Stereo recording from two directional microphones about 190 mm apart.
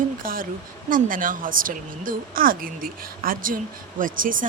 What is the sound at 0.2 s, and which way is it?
A woman's voice, 50° right (ahead or behind).